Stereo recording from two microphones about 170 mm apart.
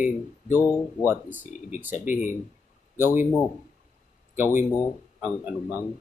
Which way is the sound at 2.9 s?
15° right (ahead or behind).